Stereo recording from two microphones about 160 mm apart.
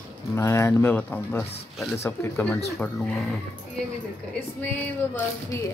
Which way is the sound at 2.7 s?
5° left (ahead or behind).